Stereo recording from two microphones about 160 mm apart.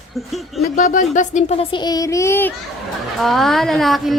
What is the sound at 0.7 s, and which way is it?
Speech, 50° left (ahead or behind).